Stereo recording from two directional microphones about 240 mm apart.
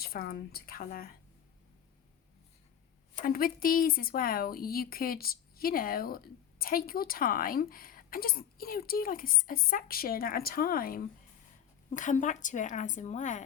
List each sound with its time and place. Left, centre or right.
0.0 s speech: left
3.2 s speech: left